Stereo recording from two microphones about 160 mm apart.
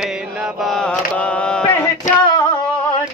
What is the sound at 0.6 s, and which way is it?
Mantra, 5° left (ahead or behind).